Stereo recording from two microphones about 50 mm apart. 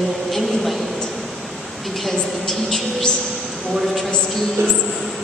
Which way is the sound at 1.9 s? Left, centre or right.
Centre.